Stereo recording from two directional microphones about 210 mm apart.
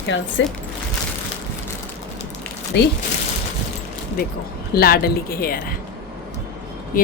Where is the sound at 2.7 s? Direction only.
55° left (ahead or behind).